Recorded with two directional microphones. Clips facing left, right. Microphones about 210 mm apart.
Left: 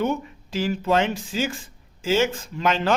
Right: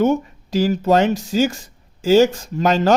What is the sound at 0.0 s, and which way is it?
Speech, 40° right (ahead or behind).